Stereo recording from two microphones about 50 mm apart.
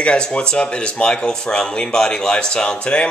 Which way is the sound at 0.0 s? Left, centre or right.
Left.